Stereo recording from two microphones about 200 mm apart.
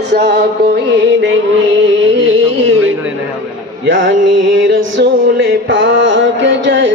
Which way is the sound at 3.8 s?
70° right (ahead or behind).